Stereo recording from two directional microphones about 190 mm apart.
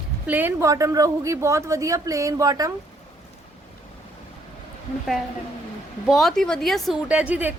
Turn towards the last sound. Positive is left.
turn(degrees=-10)  # may be behind; listen again after turning